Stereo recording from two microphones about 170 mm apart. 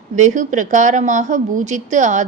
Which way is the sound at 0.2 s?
45° right (ahead or behind).